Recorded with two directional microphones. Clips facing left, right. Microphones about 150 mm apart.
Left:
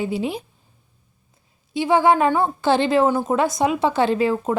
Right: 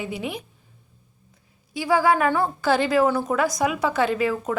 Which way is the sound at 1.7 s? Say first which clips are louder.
Left 3 dB; 25° left (ahead or behind).